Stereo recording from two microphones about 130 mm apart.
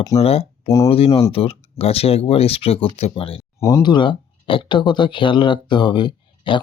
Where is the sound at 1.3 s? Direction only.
50° left (ahead or behind).